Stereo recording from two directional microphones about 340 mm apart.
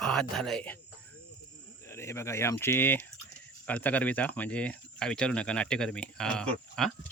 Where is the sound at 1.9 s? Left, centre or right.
Centre.